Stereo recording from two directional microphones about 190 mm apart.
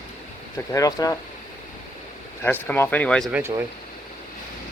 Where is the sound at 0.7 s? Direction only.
15° left (ahead or behind).